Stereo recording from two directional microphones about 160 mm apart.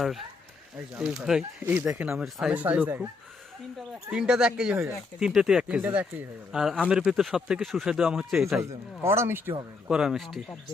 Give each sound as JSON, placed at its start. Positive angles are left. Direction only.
{"t": 0.9, "sound": "speech", "side_deg": -5}
{"t": 4.1, "sound": "speech", "side_deg": -5}
{"t": 8.7, "sound": "speech", "side_deg": -15}
{"t": 9.9, "sound": "speech", "side_deg": -5}